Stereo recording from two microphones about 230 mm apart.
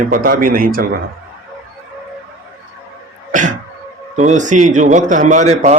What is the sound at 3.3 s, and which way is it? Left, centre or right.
Cough, right.